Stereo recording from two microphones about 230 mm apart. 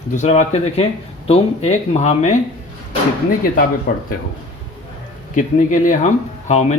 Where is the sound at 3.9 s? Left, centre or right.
Left.